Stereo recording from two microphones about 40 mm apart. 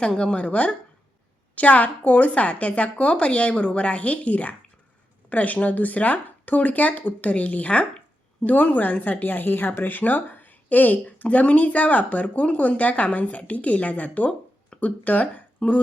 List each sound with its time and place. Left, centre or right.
0.0 s a woman's voice: left